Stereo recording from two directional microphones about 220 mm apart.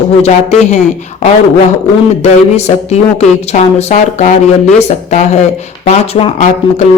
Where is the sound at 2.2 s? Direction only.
30° left (ahead or behind).